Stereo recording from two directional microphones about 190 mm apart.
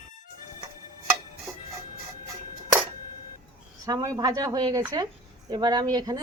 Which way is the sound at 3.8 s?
20° right (ahead or behind).